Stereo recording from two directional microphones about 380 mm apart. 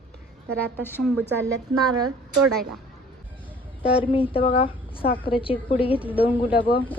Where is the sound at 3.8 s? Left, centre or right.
Centre.